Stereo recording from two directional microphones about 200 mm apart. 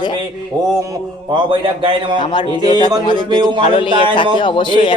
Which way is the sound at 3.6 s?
25° left (ahead or behind).